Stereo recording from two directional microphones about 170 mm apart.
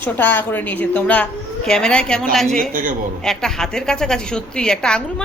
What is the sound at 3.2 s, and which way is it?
A woman's voice, 5° left (ahead or behind).